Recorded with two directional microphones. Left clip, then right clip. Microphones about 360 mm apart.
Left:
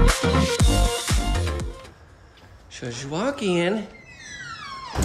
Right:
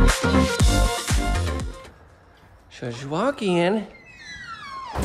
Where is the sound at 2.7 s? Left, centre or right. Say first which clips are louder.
Right 2 dB; centre.